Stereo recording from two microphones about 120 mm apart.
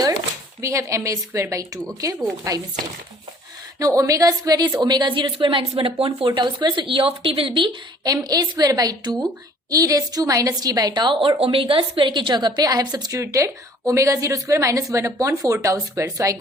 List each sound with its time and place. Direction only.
0.6 s a woman's voice: 25° right (ahead or behind)
3.8 s a woman's voice: 30° right (ahead or behind)